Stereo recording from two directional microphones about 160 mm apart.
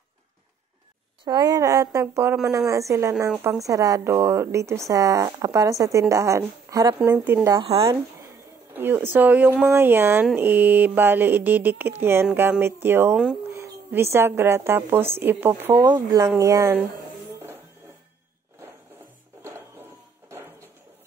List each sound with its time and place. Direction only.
1.2 s speech: 25° right (ahead or behind)
7.0 s speech: 10° right (ahead or behind)
8.7 s speech: 10° right (ahead or behind)
13.1 s speech: 5° right (ahead or behind)
13.5 s speech: 15° right (ahead or behind)
15.8 s speech: 25° right (ahead or behind)
19.4 s music: 15° right (ahead or behind)